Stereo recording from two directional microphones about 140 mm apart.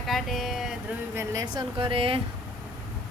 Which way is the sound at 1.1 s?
20° right (ahead or behind).